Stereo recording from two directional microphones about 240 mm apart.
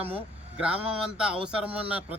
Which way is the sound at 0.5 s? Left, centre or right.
Centre.